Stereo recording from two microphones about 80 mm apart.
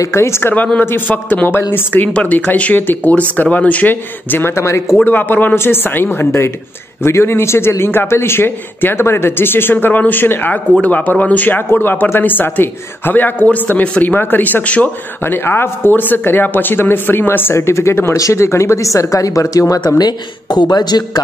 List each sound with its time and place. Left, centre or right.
0.0 s speech: left
5.0 s speech: left
20.0 s speech: left